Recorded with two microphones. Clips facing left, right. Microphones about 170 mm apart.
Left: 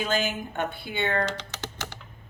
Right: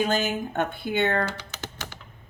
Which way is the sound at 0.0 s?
45° right (ahead or behind).